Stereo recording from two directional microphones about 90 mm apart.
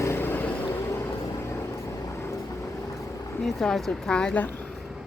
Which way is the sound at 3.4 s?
5° left (ahead or behind).